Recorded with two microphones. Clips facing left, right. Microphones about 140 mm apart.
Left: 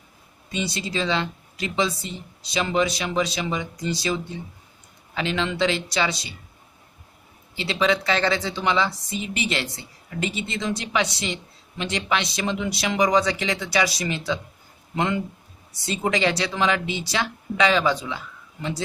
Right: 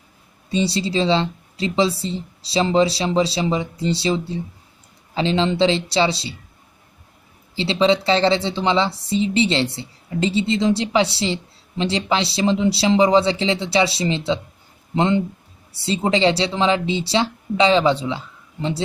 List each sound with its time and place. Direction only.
0.5 s a woman's voice: 30° right (ahead or behind)
7.5 s a woman's voice: 30° right (ahead or behind)